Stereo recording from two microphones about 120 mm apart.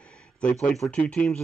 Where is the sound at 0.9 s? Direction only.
10° left (ahead or behind).